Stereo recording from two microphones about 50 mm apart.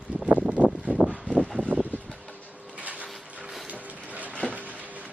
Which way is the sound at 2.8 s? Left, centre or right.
Right.